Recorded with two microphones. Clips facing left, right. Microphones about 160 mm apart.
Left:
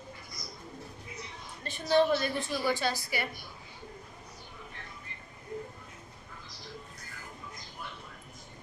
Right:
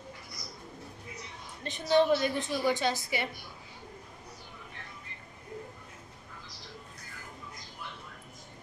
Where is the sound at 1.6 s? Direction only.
15° right (ahead or behind).